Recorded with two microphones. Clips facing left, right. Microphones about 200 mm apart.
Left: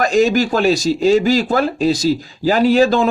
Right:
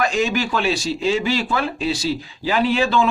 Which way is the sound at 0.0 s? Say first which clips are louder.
Left 6 dB; 40° left (ahead or behind).